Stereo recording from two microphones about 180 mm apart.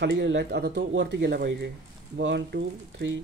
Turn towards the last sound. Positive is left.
turn(degrees=-90)